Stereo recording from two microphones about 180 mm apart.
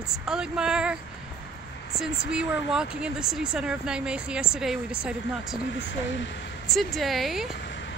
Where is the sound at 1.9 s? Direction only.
5° right (ahead or behind).